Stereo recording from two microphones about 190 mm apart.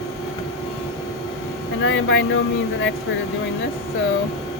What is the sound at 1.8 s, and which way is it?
Speech, 90° left.